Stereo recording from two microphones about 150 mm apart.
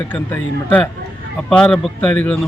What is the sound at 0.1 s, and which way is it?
A man's voice, 10° left (ahead or behind).